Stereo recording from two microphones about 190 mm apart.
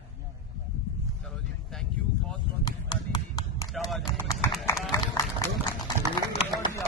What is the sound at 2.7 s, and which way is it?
Run, 20° left (ahead or behind).